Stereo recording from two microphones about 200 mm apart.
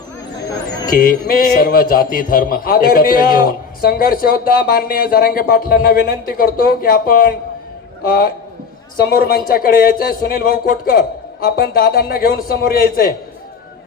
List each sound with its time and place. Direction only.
1.0 s a man's voice: 45° left (ahead or behind)
9.0 s a man's voice: 50° left (ahead or behind)